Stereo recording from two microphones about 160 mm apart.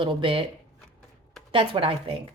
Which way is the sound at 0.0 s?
30° right (ahead or behind).